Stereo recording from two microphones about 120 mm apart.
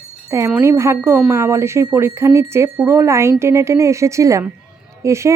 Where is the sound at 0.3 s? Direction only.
20° right (ahead or behind).